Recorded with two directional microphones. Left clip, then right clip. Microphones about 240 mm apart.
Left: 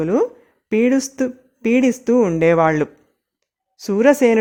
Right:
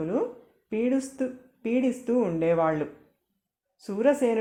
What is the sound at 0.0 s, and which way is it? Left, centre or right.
Speech, left.